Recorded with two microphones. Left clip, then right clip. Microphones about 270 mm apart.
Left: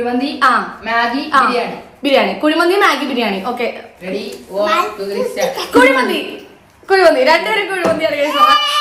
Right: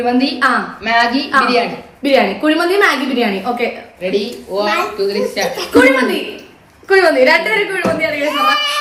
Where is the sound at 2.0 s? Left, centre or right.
Centre.